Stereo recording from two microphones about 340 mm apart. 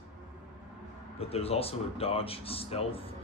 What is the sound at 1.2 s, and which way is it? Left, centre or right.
Speech, centre.